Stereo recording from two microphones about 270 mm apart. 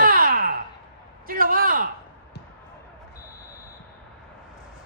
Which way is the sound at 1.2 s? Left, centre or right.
Right.